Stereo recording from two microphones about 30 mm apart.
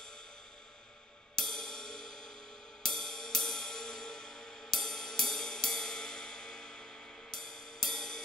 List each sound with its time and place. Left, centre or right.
1.3 s music: centre